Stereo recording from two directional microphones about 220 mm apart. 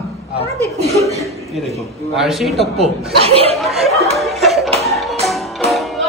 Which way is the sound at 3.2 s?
25° right (ahead or behind).